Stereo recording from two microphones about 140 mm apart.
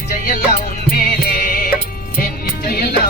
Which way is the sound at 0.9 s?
90° left.